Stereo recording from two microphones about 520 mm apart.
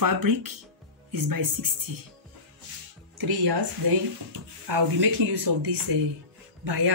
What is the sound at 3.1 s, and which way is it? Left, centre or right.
Speech, right.